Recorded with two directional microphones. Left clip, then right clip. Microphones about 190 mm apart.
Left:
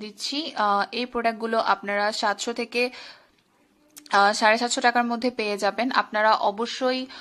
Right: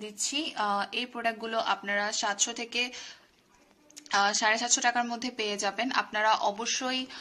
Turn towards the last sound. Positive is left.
turn(degrees=30)  # may be behind; listen again after turning